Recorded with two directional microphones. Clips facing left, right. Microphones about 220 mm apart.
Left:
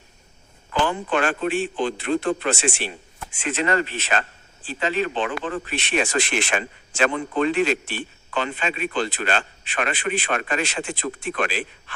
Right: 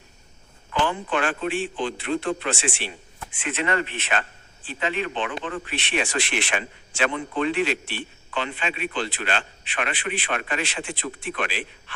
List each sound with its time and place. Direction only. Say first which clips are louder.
0.7 s speech: left 2 dB; 45° left (ahead or behind)